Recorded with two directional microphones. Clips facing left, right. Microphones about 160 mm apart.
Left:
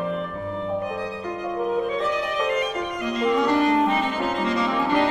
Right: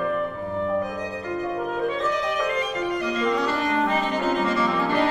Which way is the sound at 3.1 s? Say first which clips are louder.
Left 7 dB; 15° left (ahead or behind).